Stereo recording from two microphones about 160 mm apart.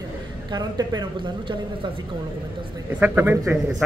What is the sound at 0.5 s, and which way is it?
Speech, 25° right (ahead or behind).